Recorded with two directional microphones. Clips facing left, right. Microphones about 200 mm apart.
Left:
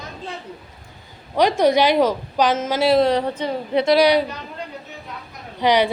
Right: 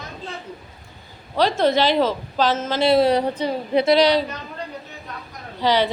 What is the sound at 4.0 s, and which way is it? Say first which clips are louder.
Speech: left 1 dB; 15° left (ahead or behind).